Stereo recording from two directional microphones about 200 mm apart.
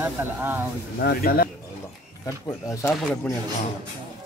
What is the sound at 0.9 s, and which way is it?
Speech, 50° left (ahead or behind).